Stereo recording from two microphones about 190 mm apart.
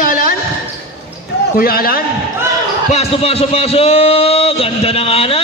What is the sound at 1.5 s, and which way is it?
Speech, 50° left (ahead or behind).